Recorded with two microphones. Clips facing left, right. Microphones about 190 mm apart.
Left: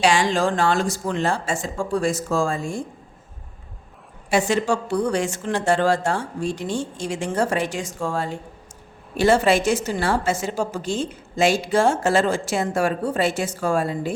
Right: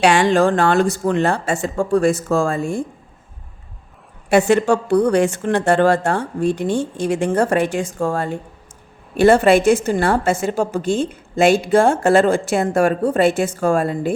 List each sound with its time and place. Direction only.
0.0 s a woman's voice: 60° right (ahead or behind)
4.3 s a woman's voice: 60° right (ahead or behind)